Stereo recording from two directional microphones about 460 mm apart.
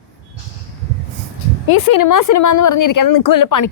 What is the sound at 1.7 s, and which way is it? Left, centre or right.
A woman's voice, left.